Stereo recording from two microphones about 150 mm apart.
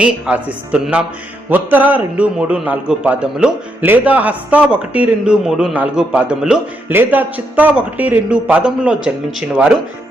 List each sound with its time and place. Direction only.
0.0 s a man's voice: 10° right (ahead or behind)